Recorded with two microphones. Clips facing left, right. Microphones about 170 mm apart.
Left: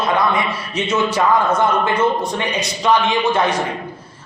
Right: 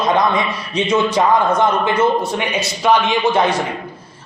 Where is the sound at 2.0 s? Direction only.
10° right (ahead or behind).